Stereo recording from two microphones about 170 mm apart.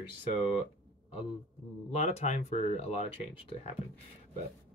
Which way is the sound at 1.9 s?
40° left (ahead or behind).